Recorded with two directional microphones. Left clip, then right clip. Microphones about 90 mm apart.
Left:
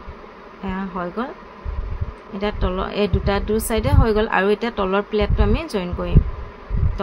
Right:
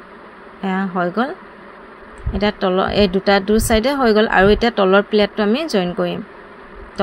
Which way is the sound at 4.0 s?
90° right.